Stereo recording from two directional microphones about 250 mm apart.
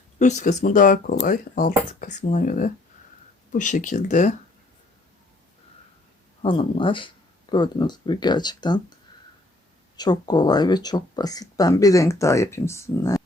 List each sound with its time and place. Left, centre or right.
0.2 s speech: left
6.4 s speech: left
10.0 s speech: centre